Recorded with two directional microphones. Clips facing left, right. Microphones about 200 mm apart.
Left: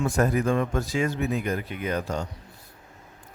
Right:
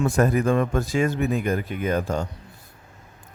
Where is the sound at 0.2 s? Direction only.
55° right (ahead or behind).